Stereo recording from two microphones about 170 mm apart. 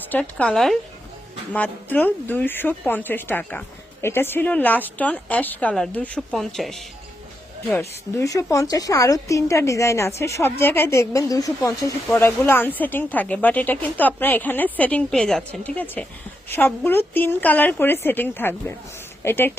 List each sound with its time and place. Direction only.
0.1 s a woman's voice: 10° left (ahead or behind)
7.8 s a woman's voice: 20° left (ahead or behind)